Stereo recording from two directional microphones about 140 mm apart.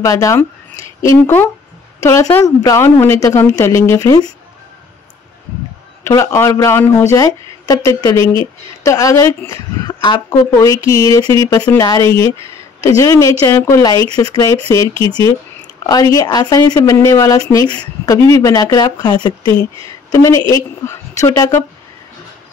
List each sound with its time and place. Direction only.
0.0 s speech: 25° left (ahead or behind)
6.0 s speech: 20° left (ahead or behind)